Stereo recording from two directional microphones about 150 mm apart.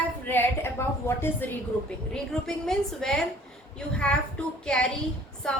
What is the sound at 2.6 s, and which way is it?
A woman's voice, 5° left (ahead or behind).